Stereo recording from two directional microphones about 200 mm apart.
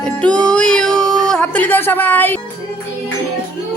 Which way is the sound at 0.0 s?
5° left (ahead or behind).